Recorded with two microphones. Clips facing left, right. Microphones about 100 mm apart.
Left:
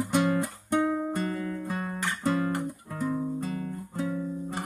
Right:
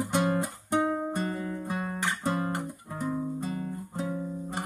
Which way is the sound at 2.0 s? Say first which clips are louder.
Left 3 dB; 20° right (ahead or behind).